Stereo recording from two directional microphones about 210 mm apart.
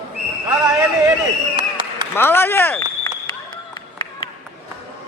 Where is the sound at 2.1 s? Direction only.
10° left (ahead or behind).